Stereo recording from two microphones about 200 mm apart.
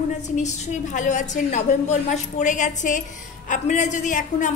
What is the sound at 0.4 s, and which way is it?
A woman's voice, 35° left (ahead or behind).